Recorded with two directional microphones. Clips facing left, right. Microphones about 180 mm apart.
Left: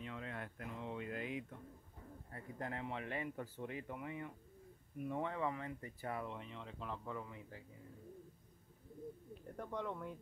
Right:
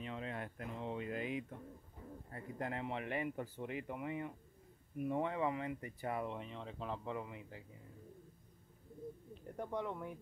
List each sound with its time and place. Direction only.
0.0 s a sound: 25° right (ahead or behind)
2.3 s speech: 20° right (ahead or behind)
9.3 s speech: 15° right (ahead or behind)